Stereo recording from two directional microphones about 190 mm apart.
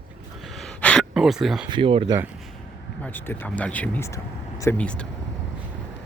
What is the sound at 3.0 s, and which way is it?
Speech, 10° left (ahead or behind).